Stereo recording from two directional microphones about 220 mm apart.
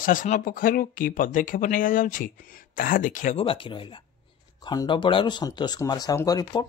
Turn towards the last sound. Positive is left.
turn(degrees=15)  # may be behind; listen again after turning